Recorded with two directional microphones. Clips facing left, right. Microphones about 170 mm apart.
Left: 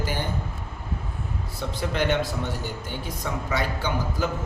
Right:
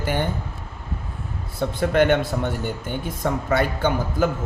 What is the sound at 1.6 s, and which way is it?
A man's voice, 55° right (ahead or behind).